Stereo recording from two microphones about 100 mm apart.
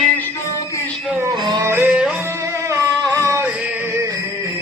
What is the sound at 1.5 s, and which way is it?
Yodeling, 25° right (ahead or behind).